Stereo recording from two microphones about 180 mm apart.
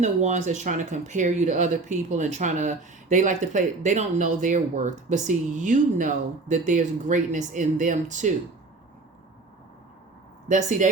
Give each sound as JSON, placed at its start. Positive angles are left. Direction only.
{"t": 0.0, "sound": "speech", "side_deg": -40}
{"t": 10.5, "sound": "speech", "side_deg": -45}